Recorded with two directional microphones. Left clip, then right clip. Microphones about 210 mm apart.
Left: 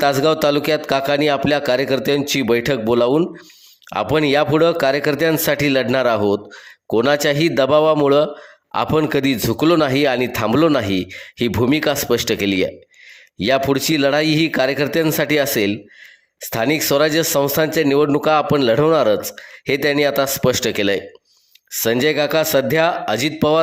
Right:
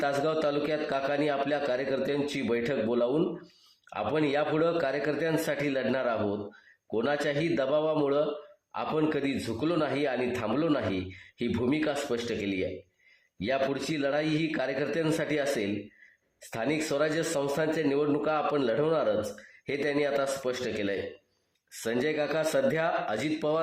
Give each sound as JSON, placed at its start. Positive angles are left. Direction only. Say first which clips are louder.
{"t": 0.0, "sound": "a man's voice", "louder": "left 12 dB", "side_deg": 40}